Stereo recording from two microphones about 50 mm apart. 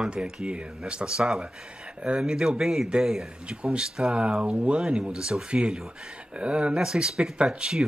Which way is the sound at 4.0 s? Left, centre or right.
Right.